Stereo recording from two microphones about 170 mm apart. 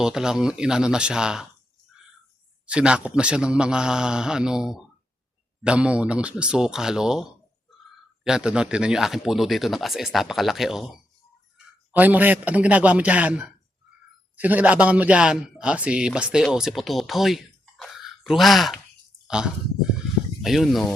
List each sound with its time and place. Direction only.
0.0 s speech: 5° right (ahead or behind)
2.6 s a man's voice: 5° right (ahead or behind)